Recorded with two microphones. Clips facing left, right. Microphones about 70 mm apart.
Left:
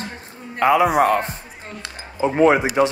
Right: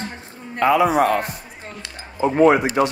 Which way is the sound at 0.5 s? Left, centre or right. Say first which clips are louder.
Left 1 dB; left.